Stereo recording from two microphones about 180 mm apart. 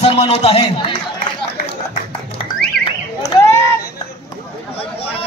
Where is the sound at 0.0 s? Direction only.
35° left (ahead or behind).